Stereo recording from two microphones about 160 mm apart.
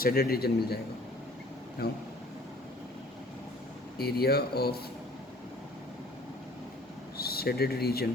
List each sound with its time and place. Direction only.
0.0 s speech: 70° left (ahead or behind)
1.8 s speech: 90° left
3.9 s speech: 75° left (ahead or behind)
7.2 s speech: 75° left (ahead or behind)